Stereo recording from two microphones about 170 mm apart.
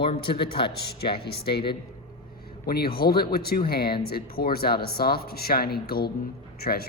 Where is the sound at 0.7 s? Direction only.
70° left (ahead or behind).